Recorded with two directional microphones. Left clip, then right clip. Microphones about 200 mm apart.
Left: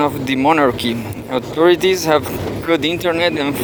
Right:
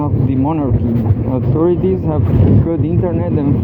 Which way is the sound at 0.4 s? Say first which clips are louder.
Left 10 dB; 70° left (ahead or behind).